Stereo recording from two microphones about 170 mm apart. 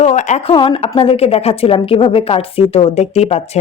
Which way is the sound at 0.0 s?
45° left (ahead or behind).